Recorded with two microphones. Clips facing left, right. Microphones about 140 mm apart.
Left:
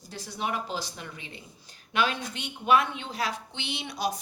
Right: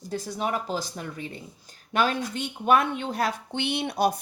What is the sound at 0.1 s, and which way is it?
Speech, 45° right (ahead or behind).